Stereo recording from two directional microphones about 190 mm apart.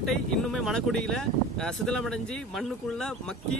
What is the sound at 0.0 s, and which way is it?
Speech, centre (ahead or behind).